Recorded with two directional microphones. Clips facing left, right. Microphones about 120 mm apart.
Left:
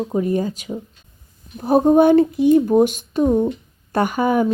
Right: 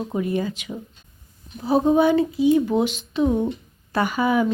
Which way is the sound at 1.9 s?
55° left (ahead or behind).